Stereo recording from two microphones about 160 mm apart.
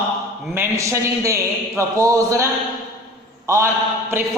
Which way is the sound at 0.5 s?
15° right (ahead or behind).